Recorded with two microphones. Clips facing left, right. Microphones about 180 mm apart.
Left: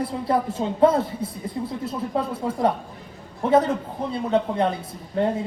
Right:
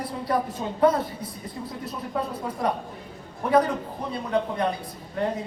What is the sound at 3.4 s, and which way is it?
Speech, 25° left (ahead or behind).